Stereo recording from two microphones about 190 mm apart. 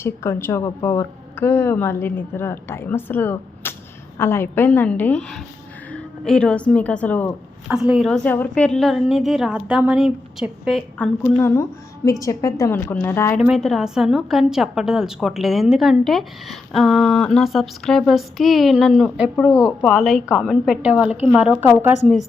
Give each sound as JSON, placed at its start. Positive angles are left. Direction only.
{"t": 0.0, "sound": "a woman's voice", "side_deg": 15}
{"t": 7.7, "sound": "a woman's voice", "side_deg": -5}
{"t": 13.4, "sound": "a woman's voice", "side_deg": 0}
{"t": 19.4, "sound": "a woman's voice", "side_deg": 15}
{"t": 19.8, "sound": "a woman's voice", "side_deg": 0}